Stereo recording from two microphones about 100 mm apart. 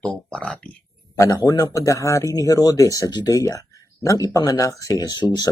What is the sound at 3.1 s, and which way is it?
Speech, 45° left (ahead or behind).